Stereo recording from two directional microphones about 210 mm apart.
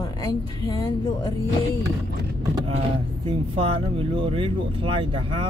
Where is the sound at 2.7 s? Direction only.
25° right (ahead or behind).